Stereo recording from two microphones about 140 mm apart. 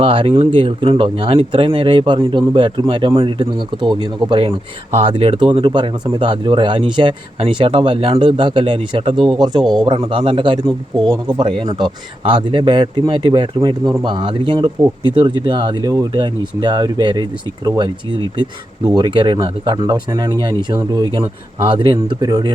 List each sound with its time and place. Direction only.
0.0 s a man's voice: 40° right (ahead or behind)
9.1 s speech: 5° right (ahead or behind)
9.4 s a man's voice: 30° right (ahead or behind)
10.7 s speech: centre (ahead or behind)
11.3 s a man's voice: 30° right (ahead or behind)
18.9 s a man's voice: 30° right (ahead or behind)